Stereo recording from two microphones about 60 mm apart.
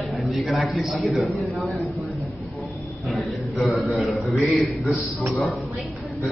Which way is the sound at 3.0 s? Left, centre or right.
Centre.